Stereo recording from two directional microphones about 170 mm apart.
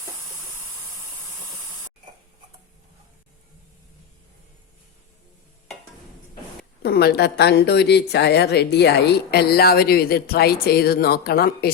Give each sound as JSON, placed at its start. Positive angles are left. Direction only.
{"t": 6.8, "sound": "a woman's voice", "side_deg": 70}